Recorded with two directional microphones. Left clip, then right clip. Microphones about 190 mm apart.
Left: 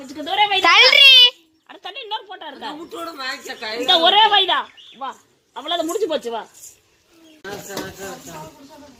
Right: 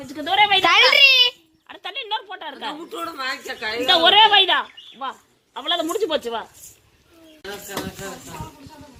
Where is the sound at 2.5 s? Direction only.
25° left (ahead or behind).